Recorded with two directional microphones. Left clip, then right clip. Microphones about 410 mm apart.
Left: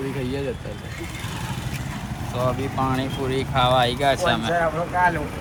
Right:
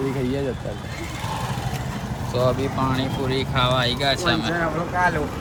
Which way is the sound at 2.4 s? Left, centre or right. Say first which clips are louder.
Right 1 dB; centre.